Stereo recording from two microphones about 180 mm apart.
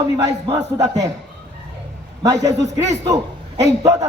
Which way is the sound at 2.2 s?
20° right (ahead or behind).